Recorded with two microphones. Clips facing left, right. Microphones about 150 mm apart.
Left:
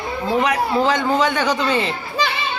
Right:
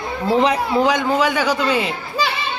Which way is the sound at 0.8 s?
15° right (ahead or behind).